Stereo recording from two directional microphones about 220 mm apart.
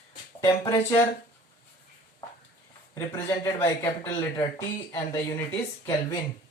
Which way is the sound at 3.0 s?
15° left (ahead or behind).